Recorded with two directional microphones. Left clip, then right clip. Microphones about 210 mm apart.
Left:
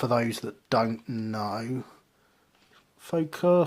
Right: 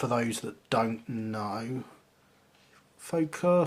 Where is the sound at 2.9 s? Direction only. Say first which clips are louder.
Left 1 dB; 40° left (ahead or behind).